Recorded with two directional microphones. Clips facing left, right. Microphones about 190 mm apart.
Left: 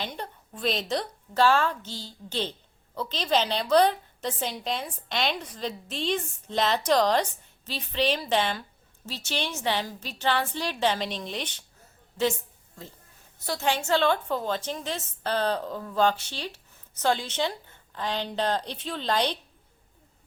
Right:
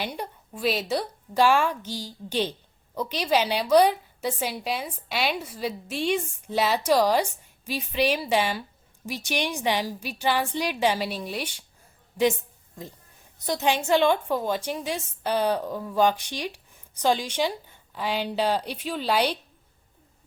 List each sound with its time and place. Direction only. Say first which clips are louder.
0.0 s a woman's voice: right 3 dB; 10° right (ahead or behind)
12.8 s a woman's voice: right 4 dB; 15° right (ahead or behind)